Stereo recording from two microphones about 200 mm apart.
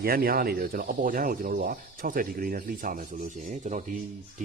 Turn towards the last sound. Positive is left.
turn(degrees=-35)  # may be behind; listen again after turning